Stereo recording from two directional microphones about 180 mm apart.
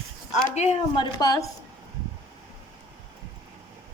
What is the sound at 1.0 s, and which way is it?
Speech, 20° left (ahead or behind).